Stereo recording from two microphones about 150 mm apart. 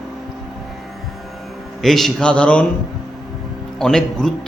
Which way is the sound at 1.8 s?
Centre (ahead or behind).